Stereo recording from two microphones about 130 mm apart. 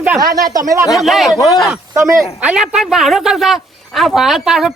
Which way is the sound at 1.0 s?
Centre (ahead or behind).